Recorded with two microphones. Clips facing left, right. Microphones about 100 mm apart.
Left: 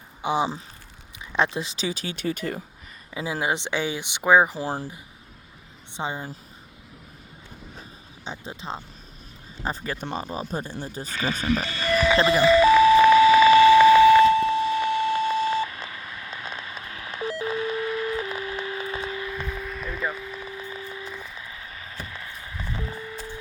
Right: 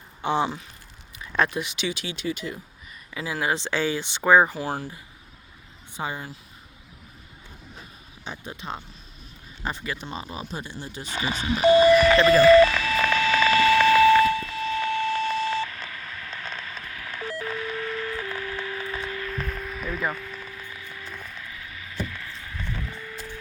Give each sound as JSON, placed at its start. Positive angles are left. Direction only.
{"t": 0.2, "sound": "speech", "side_deg": 10}
{"t": 3.2, "sound": "speech", "side_deg": 25}
{"t": 4.5, "sound": "speech", "side_deg": 30}
{"t": 5.9, "sound": "speech", "side_deg": 25}
{"t": 8.2, "sound": "speech", "side_deg": 25}
{"t": 9.6, "sound": "speech", "side_deg": 40}
{"t": 10.5, "sound": "speech", "side_deg": 45}
{"t": 11.8, "sound": "a sound", "side_deg": -15}
{"t": 12.1, "sound": "a sound", "side_deg": 20}
{"t": 19.3, "sound": "music", "side_deg": 5}
{"t": 21.1, "sound": "a sound", "side_deg": 10}
{"t": 21.4, "sound": "a sound", "side_deg": 30}